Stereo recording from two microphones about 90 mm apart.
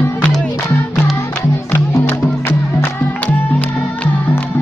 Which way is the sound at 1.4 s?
30° left (ahead or behind).